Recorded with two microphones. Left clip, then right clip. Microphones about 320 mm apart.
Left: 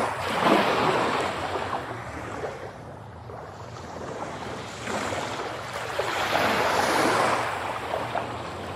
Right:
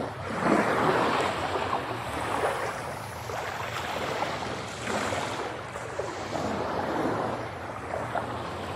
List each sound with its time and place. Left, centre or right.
0.3 s boat: centre
4.9 s a sound: centre
6.3 s waves: left